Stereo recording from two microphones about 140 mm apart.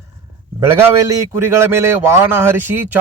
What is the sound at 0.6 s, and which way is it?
A man's voice, 20° right (ahead or behind).